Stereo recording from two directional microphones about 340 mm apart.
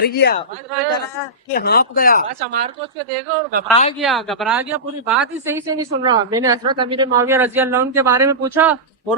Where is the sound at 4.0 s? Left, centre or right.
Centre.